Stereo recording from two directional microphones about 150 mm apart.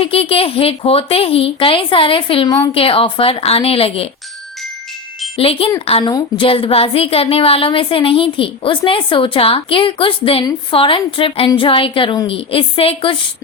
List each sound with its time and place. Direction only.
0.0 s a woman's voice: 40° left (ahead or behind)
5.4 s a woman's voice: 40° left (ahead or behind)